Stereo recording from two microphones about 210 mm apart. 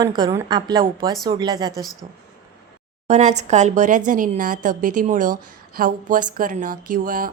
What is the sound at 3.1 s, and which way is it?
Speech, 35° right (ahead or behind).